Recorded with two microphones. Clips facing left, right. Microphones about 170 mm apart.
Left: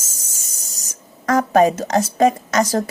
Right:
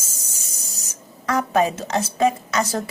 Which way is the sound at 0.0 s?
45° left (ahead or behind).